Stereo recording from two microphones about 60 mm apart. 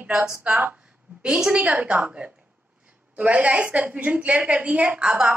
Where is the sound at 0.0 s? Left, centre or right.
Centre.